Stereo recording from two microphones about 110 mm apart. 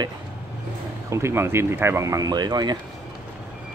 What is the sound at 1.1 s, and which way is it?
Speech, 25° right (ahead or behind).